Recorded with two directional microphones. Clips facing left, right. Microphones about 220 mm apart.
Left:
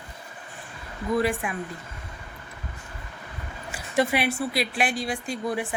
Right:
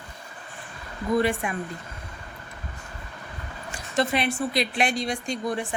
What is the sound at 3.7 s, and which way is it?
A woman's voice, 10° left (ahead or behind).